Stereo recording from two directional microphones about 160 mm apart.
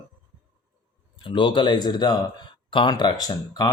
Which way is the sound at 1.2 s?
30° left (ahead or behind).